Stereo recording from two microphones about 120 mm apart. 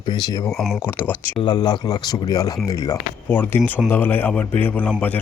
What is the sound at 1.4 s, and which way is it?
Speech, 35° left (ahead or behind).